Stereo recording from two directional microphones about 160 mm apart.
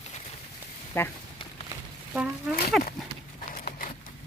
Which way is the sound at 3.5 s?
60° left (ahead or behind).